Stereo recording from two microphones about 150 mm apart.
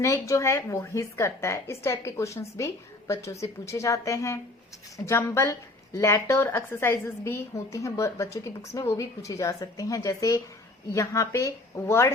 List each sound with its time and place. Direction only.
0.0 s a woman's voice: 20° left (ahead or behind)